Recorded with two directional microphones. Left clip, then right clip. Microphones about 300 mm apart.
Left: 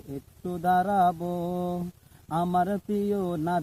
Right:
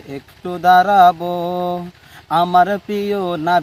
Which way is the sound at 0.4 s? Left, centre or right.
Right.